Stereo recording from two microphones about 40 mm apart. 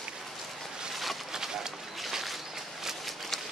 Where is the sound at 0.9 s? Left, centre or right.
Centre.